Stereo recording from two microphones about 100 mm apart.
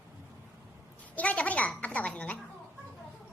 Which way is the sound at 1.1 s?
15° left (ahead or behind).